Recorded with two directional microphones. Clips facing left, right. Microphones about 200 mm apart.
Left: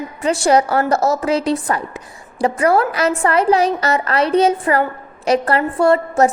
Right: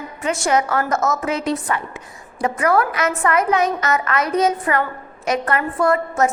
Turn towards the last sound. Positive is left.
turn(degrees=30)  # may be behind; listen again after turning